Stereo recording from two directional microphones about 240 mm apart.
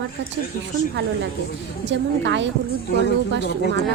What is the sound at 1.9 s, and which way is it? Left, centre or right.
Speech, right.